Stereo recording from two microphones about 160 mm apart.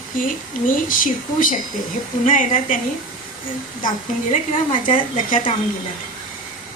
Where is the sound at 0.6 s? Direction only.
55° left (ahead or behind).